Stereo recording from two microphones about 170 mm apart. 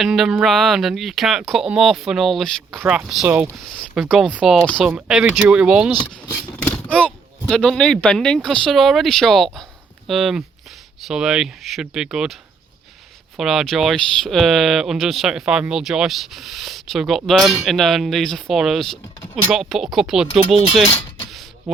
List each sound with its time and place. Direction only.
0.0 s speech: centre (ahead or behind)
4.6 s speech: 5° left (ahead or behind)
4.9 s speech: 10° right (ahead or behind)
5.9 s speech: 20° left (ahead or behind)
6.8 s speech: 5° left (ahead or behind)